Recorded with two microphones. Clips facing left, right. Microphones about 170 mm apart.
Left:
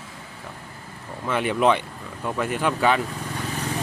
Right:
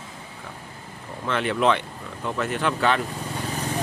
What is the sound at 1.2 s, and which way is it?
Speech, 10° left (ahead or behind).